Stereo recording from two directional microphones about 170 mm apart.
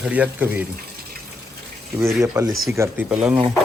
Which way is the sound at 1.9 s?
20° right (ahead or behind).